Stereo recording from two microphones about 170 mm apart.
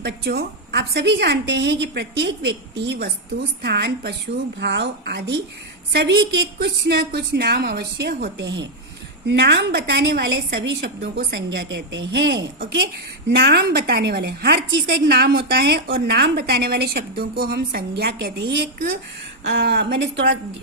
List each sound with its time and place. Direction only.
0.0 s a woman's voice: 75° right (ahead or behind)
13.3 s a woman's voice: 75° right (ahead or behind); by 20.4 s 90° right